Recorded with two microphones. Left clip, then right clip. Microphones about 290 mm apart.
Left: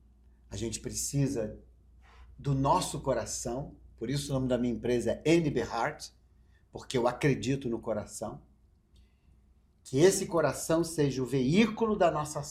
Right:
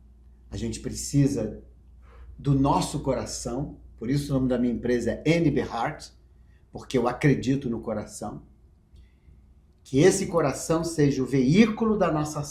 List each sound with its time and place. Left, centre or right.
0.5 s speech: left
2.4 s speech: left
9.8 s speech: left